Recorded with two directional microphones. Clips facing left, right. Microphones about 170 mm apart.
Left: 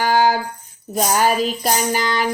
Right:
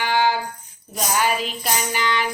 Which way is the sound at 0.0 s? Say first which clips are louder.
Left 4 dB; 40° left (ahead or behind).